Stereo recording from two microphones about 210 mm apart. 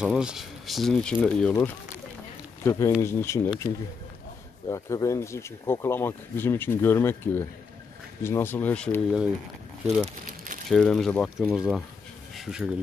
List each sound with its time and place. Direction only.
0.0 s speech: 5° right (ahead or behind)
10.2 s crumpling: 40° right (ahead or behind)
10.7 s speech: centre (ahead or behind)